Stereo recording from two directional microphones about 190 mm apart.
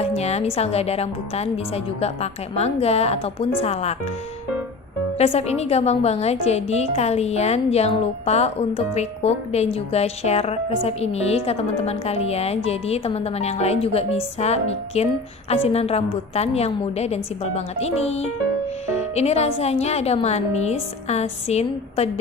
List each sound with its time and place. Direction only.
0.0 s music: 35° left (ahead or behind)
0.6 s a woman's voice: 35° left (ahead or behind)
5.1 s a woman's voice: 35° left (ahead or behind)